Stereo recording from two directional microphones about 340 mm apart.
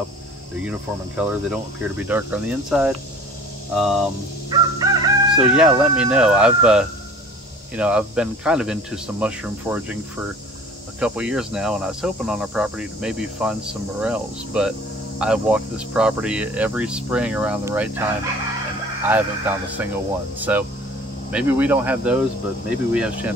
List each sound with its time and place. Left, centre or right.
0.7 s speech: centre
4.5 s chicken: centre
7.7 s speech: centre
11.0 s speech: centre
19.0 s speech: centre